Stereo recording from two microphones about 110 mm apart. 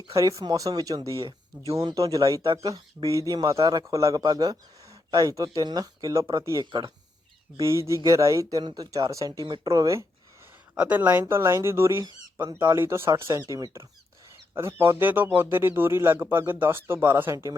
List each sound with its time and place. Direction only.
0.1 s a man's voice: 30° right (ahead or behind)
7.6 s a man's voice: 30° right (ahead or behind)
10.8 s speech: 15° right (ahead or behind)
12.0 s speech: 40° right (ahead or behind)
12.7 s speech: 20° right (ahead or behind)